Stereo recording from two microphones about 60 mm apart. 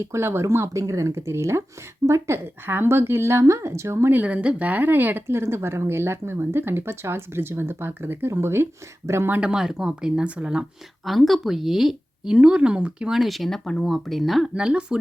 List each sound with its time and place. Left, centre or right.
0.0 s speech: right
0.5 s speech: right
4.1 s speech: right
9.4 s speech: centre
11.0 s speech: centre
13.1 s speech: centre
14.5 s speech: centre